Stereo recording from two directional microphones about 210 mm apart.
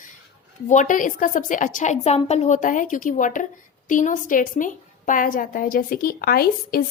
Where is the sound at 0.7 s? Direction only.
35° left (ahead or behind).